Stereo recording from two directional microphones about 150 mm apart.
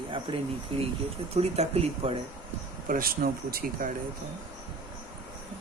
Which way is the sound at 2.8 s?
70° right (ahead or behind).